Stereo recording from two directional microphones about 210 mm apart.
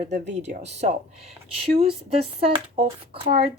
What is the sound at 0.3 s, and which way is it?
Speech, 30° right (ahead or behind).